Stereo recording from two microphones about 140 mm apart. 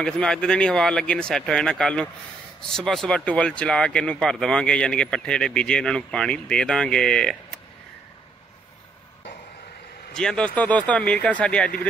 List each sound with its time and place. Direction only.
0.0 s speech: 5° left (ahead or behind)
10.1 s speech: 5° left (ahead or behind)